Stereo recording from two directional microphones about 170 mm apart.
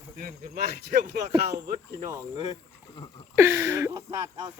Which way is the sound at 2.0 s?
25° right (ahead or behind).